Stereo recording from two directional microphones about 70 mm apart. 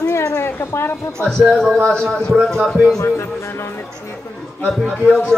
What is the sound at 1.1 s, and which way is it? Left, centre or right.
Speech, centre.